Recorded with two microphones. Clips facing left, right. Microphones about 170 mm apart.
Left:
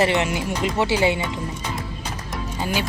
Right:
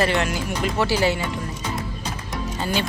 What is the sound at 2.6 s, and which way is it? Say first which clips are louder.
Speech: even; 10° left (ahead or behind).